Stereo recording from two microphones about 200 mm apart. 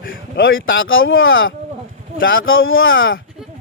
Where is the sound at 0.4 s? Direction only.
75° left (ahead or behind).